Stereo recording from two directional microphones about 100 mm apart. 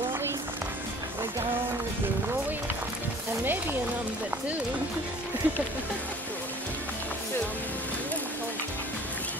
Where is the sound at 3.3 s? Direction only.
20° right (ahead or behind).